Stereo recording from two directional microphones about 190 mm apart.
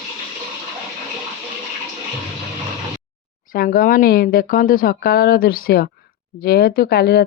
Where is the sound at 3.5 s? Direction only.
50° left (ahead or behind).